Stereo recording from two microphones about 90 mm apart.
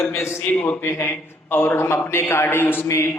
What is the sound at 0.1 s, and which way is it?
A man's voice, 30° left (ahead or behind).